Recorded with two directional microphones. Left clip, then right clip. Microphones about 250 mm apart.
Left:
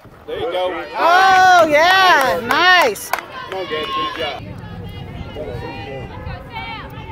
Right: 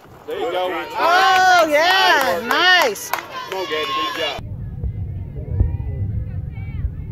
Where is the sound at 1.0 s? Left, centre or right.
Left.